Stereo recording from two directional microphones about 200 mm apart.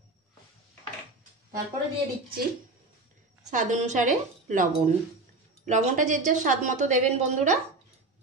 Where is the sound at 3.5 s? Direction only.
35° right (ahead or behind).